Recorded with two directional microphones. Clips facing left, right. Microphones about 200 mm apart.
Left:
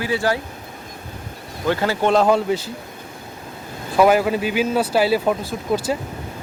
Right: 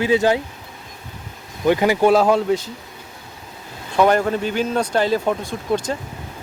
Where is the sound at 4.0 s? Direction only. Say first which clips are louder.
Left 1 dB; 5° left (ahead or behind).